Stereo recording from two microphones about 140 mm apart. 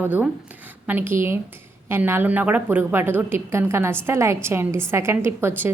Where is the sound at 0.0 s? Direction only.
10° right (ahead or behind).